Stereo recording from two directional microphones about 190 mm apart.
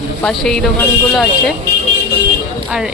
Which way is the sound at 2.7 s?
5° right (ahead or behind).